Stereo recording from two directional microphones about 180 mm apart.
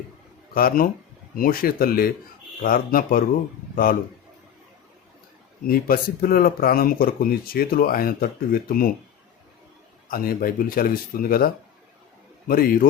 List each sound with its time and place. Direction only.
0.5 s speech: 55° left (ahead or behind)
5.6 s speech: 55° left (ahead or behind)
10.1 s a man's voice: 50° left (ahead or behind)